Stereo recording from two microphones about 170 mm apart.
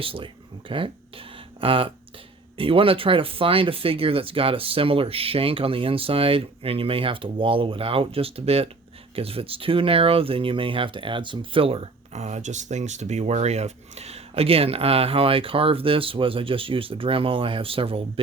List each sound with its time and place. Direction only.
0.0 s speech: 30° right (ahead or behind)